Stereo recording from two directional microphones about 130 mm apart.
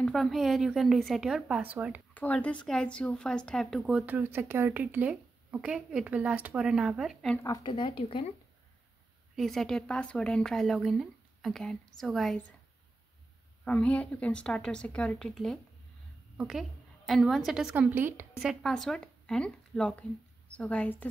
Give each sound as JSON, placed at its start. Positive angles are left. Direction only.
{"t": 0.0, "sound": "speech", "side_deg": 0}
{"t": 2.1, "sound": "speech", "side_deg": 10}
{"t": 7.6, "sound": "speech", "side_deg": 40}
{"t": 9.3, "sound": "speech", "side_deg": 0}
{"t": 13.7, "sound": "a woman's voice", "side_deg": 10}
{"t": 17.9, "sound": "a woman's voice", "side_deg": -15}
{"t": 18.4, "sound": "speech", "side_deg": -5}